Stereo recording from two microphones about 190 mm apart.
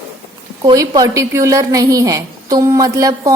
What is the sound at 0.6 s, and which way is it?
A woman's voice, 20° right (ahead or behind).